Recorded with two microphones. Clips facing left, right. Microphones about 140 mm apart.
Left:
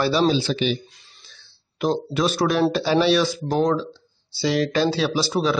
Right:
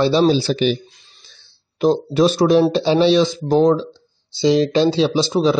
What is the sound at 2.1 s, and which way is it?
Speech, 30° right (ahead or behind).